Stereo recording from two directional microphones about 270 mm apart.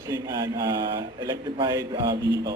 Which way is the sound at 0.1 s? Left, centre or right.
Centre.